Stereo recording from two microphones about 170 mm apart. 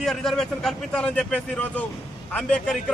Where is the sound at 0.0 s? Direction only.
Centre (ahead or behind).